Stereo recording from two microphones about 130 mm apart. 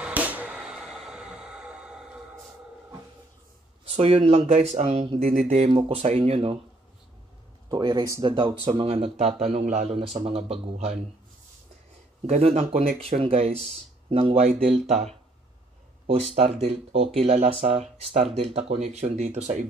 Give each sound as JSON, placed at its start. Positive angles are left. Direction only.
{"t": 0.0, "sound": "music", "side_deg": -10}
{"t": 3.8, "sound": "speech", "side_deg": -50}
{"t": 5.5, "sound": "speech", "side_deg": -60}
{"t": 7.7, "sound": "speech", "side_deg": -35}
{"t": 12.3, "sound": "speech", "side_deg": -55}
{"t": 16.1, "sound": "speech", "side_deg": -55}